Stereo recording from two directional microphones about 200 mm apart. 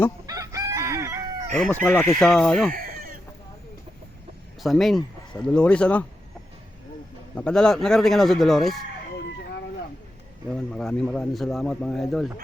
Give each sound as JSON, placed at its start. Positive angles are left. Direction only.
{"t": 0.3, "sound": "chicken", "side_deg": -15}
{"t": 1.5, "sound": "speech", "side_deg": 5}
{"t": 2.1, "sound": "speech", "side_deg": 0}
{"t": 2.7, "sound": "a sound", "side_deg": -45}
{"t": 4.6, "sound": "speech", "side_deg": 0}
{"t": 7.3, "sound": "speech", "side_deg": 5}
{"t": 10.5, "sound": "speech", "side_deg": 0}